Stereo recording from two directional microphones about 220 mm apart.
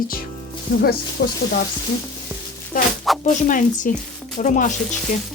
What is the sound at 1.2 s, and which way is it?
Stir, 45° left (ahead or behind).